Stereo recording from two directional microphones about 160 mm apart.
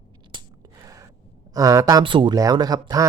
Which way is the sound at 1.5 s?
20° right (ahead or behind).